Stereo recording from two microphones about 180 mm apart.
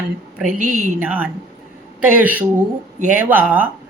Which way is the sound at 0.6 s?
45° right (ahead or behind).